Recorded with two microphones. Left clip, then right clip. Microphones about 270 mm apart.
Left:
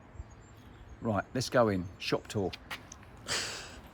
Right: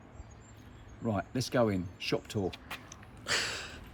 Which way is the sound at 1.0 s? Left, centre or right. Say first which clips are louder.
Left 2 dB; centre.